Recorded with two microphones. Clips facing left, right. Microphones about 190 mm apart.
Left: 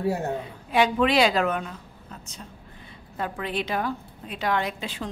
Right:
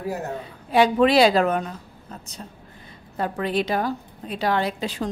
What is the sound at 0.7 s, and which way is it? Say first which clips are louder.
A woman's voice: right 4 dB; 35° right (ahead or behind).